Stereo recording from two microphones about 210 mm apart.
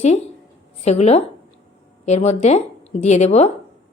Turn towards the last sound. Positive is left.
turn(degrees=30)  # may be behind; listen again after turning